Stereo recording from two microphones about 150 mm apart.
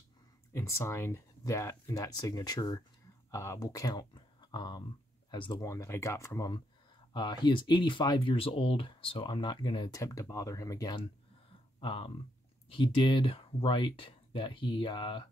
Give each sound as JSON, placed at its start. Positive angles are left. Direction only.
{"t": 0.5, "sound": "speech", "side_deg": 20}
{"t": 5.7, "sound": "speech", "side_deg": 20}